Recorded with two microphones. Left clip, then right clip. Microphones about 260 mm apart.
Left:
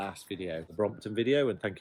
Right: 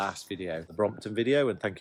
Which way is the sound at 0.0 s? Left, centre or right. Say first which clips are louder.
Right 4 dB; centre.